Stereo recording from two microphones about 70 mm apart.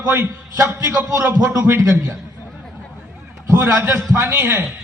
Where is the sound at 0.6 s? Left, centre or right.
Right.